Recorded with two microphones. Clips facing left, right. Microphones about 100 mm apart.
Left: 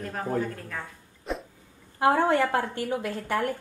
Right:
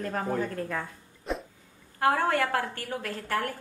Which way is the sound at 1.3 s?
Centre (ahead or behind).